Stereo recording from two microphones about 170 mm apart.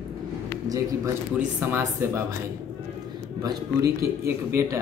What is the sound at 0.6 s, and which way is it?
Speech, 20° right (ahead or behind).